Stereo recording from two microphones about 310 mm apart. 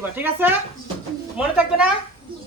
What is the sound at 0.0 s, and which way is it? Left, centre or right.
Speech, centre.